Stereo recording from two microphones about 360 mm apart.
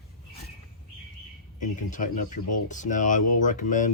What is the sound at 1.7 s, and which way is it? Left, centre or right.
Speech, left.